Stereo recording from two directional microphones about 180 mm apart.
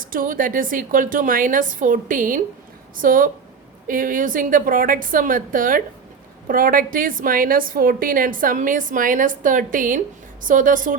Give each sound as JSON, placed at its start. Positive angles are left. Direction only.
{"t": 0.0, "sound": "a woman's voice", "side_deg": -50}